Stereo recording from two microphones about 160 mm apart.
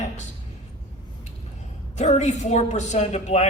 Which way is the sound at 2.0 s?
45° left (ahead or behind).